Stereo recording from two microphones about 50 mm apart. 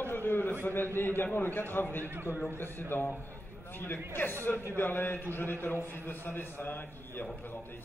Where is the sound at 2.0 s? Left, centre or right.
Right.